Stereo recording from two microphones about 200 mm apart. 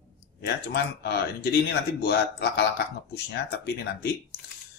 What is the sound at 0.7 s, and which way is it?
Speech, 55° left (ahead or behind).